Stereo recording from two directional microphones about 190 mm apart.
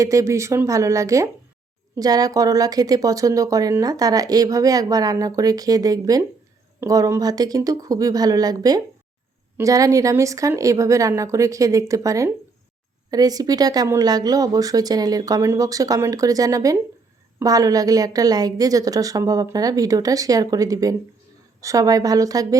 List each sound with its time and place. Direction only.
0.0 s speech: 15° right (ahead or behind)